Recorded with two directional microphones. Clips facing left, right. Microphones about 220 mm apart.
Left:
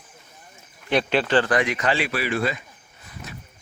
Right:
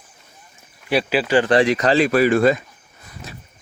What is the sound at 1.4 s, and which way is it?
Speech, 30° right (ahead or behind).